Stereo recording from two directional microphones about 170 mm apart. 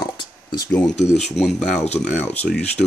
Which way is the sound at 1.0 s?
40° left (ahead or behind).